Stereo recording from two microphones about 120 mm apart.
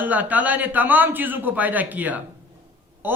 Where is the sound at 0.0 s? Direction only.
15° right (ahead or behind).